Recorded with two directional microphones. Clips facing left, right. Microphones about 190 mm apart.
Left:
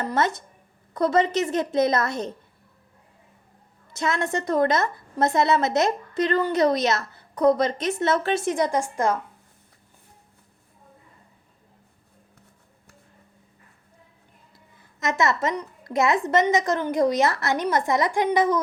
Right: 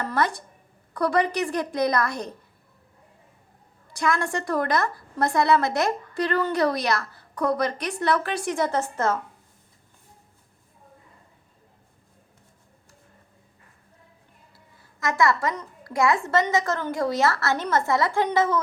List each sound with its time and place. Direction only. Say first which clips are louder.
0.0 s a woman's voice: left 1 dB; 20° left (ahead or behind)
3.9 s a woman's voice: even; 25° left (ahead or behind)
15.0 s a woman's voice: even; 20° left (ahead or behind)